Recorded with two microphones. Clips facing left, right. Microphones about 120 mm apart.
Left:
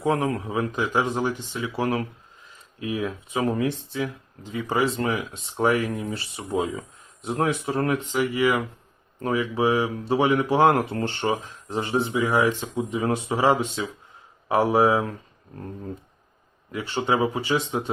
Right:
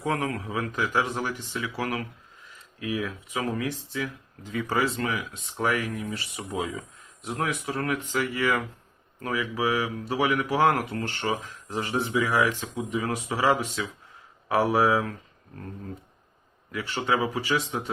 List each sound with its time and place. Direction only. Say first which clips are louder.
0.0 s speech: left 5 dB; 25° left (ahead or behind)
9.2 s speech: left 5 dB; 30° left (ahead or behind)
16.7 s speech: left 3 dB; 25° left (ahead or behind)